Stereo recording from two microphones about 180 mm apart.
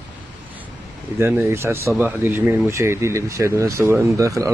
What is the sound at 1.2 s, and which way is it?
Speech, 15° right (ahead or behind).